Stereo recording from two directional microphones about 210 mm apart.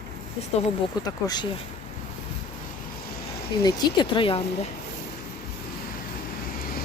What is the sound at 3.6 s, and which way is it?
Speech, 20° left (ahead or behind).